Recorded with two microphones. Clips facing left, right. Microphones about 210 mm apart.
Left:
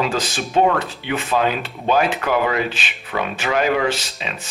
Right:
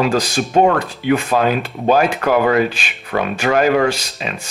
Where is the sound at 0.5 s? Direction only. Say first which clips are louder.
Right 3 dB; 45° right (ahead or behind).